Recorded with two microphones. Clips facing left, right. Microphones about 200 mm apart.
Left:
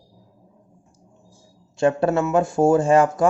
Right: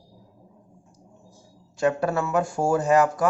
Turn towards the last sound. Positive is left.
turn(degrees=25)  # may be behind; listen again after turning